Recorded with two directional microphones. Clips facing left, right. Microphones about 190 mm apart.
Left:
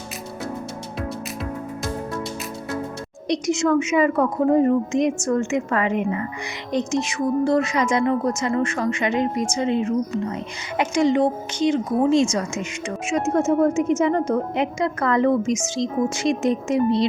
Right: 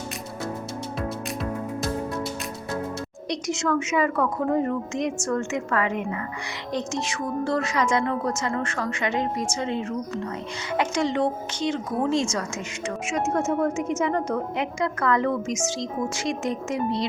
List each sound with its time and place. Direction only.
3.2 s a woman's voice: 20° left (ahead or behind)